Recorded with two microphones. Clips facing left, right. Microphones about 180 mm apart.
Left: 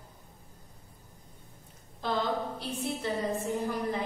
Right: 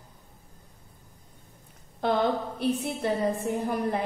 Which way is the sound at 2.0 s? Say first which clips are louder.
Right 5 dB; 60° right (ahead or behind).